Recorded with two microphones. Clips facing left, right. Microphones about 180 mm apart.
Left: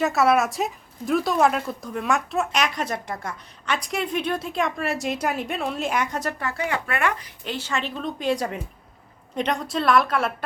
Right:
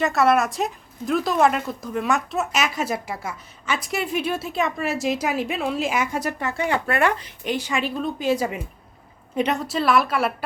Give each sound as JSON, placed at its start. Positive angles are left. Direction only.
{"t": 0.0, "sound": "speech", "side_deg": 0}
{"t": 6.4, "sound": "speech", "side_deg": -25}
{"t": 7.4, "sound": "a woman's voice", "side_deg": -15}